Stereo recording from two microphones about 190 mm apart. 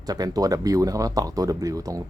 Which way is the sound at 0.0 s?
20° right (ahead or behind).